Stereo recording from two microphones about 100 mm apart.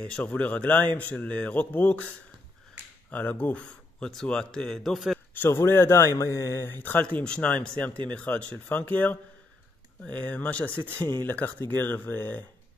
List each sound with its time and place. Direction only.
0.0 s speech: 15° left (ahead or behind)
5.4 s speech: 25° left (ahead or behind)